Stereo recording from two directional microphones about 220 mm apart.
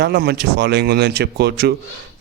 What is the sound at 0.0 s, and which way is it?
A man's voice, 45° right (ahead or behind).